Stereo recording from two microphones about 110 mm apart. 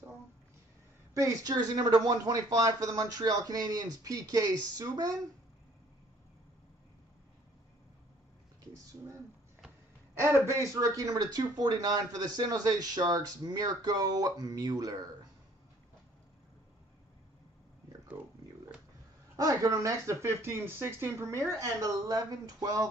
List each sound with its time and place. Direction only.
1.1 s speech: 35° right (ahead or behind)
10.2 s speech: 25° right (ahead or behind)
19.3 s speech: 30° right (ahead or behind)